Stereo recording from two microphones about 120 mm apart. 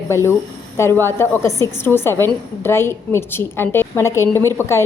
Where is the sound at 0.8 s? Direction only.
20° left (ahead or behind).